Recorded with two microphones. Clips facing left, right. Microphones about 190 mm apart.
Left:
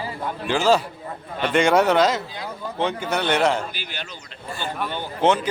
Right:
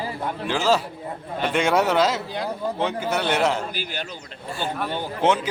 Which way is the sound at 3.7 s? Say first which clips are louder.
Right 4 dB; 40° right (ahead or behind).